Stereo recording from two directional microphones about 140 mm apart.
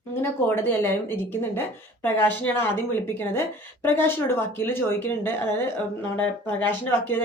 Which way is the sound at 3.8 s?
15° left (ahead or behind).